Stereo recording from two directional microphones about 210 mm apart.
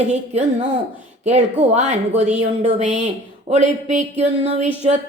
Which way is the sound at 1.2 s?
30° right (ahead or behind).